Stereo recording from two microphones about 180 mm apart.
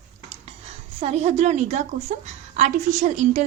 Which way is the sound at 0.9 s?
40° right (ahead or behind).